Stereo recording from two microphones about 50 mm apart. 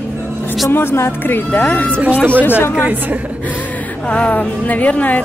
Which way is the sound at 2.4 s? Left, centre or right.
Left.